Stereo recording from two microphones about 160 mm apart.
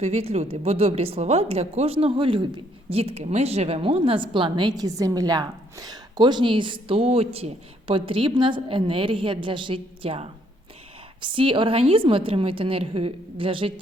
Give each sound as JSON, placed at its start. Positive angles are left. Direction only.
{"t": 0.0, "sound": "a woman's voice", "side_deg": -40}